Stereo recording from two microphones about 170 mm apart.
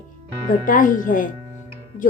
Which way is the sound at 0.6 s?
50° left (ahead or behind).